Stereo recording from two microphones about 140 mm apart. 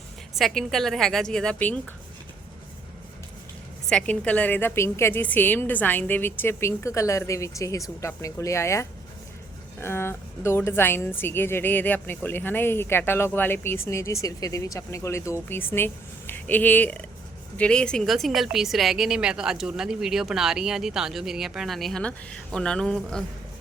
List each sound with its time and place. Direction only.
0.3 s speech: centre (ahead or behind)
3.8 s a woman's voice: 10° left (ahead or behind)